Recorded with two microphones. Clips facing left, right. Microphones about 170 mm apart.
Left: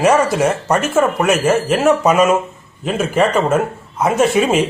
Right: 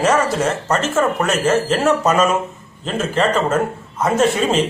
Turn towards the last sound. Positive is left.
turn(degrees=10)  # may be behind; listen again after turning